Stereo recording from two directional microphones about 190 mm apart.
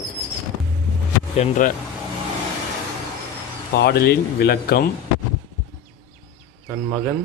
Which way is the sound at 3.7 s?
55° left (ahead or behind).